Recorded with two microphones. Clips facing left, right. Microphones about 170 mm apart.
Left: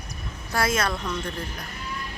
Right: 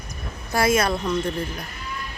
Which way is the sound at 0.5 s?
10° right (ahead or behind).